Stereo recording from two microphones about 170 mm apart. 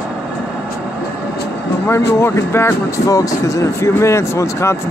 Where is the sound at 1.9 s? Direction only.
20° left (ahead or behind).